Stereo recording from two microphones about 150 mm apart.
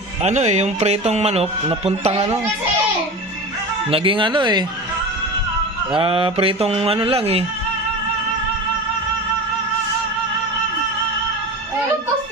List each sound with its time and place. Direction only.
0.2 s speech: 50° right (ahead or behind)
3.9 s speech: 35° right (ahead or behind)
5.9 s speech: 35° right (ahead or behind)